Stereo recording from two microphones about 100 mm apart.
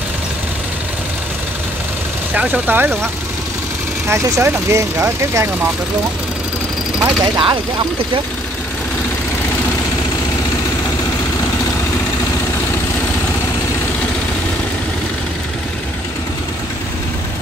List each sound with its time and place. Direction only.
2.3 s speech: 15° right (ahead or behind)
4.1 s speech: 30° right (ahead or behind)
7.2 s speech: 45° right (ahead or behind)